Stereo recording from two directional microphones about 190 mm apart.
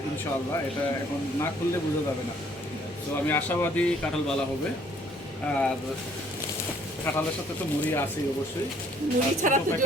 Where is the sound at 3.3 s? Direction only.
10° left (ahead or behind).